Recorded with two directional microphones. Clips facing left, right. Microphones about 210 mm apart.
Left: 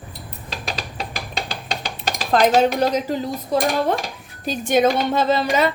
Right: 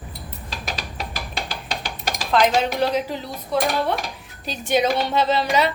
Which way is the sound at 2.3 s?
45° left (ahead or behind).